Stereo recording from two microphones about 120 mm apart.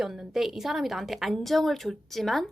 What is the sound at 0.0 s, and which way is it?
A woman's voice, 5° right (ahead or behind).